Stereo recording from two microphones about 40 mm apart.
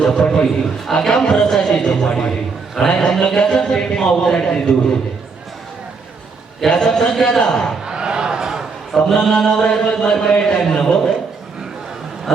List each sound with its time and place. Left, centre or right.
0.0 s a man's voice: centre
6.7 s a man's voice: centre
7.9 s a sound: right
8.9 s speech: centre
9.3 s a man's voice: centre